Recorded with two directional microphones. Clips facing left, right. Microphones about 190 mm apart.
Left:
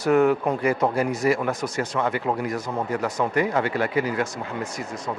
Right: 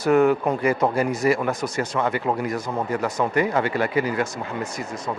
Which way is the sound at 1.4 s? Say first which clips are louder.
Right 1 dB; 25° right (ahead or behind).